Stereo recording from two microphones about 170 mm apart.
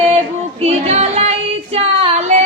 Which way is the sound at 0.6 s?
40° right (ahead or behind).